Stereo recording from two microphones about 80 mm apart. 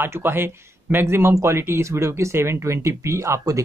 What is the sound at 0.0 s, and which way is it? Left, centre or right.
Speech, right.